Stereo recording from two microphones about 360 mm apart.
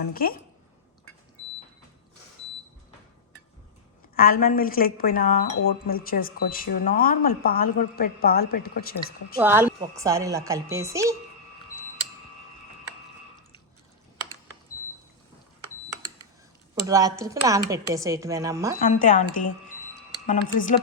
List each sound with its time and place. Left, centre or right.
0.0 s speech: left
4.1 s speech: left
9.4 s a woman's voice: centre
16.8 s a woman's voice: centre
18.8 s speech: left